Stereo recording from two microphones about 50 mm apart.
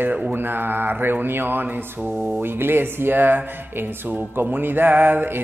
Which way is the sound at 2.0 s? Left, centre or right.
Centre.